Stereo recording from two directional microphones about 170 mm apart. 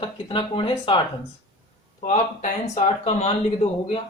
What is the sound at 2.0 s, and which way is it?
Speech, 45° left (ahead or behind).